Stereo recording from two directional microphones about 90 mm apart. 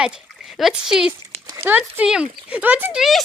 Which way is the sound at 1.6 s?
20° right (ahead or behind).